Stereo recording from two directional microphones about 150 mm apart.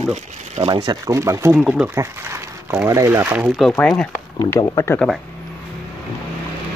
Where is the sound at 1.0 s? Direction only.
20° right (ahead or behind).